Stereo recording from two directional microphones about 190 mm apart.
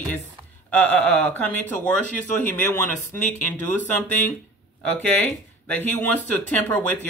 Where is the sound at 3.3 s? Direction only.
40° left (ahead or behind).